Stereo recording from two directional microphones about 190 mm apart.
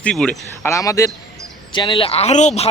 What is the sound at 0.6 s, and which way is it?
A man's voice, 15° left (ahead or behind).